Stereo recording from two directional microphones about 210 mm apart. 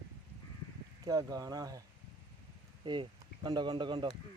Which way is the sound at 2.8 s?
20° right (ahead or behind).